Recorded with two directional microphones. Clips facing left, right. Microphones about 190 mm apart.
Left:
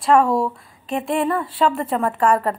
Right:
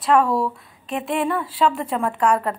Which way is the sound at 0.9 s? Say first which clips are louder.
Left 2 dB; centre (ahead or behind).